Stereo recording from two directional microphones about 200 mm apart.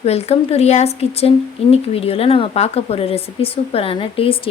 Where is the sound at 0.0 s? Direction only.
30° left (ahead or behind).